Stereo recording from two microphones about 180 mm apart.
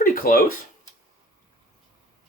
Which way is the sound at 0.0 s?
50° left (ahead or behind).